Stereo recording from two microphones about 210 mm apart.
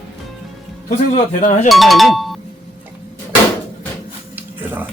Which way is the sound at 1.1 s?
35° left (ahead or behind).